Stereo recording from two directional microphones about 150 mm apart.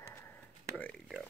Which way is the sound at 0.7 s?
5° left (ahead or behind).